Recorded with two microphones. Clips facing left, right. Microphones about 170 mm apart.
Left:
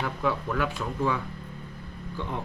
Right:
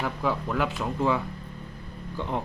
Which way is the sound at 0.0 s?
10° right (ahead or behind).